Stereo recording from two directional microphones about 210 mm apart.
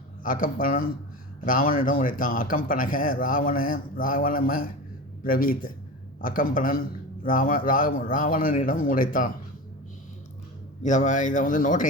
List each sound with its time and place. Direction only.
0.2 s speech: 40° left (ahead or behind)
10.8 s speech: 35° left (ahead or behind)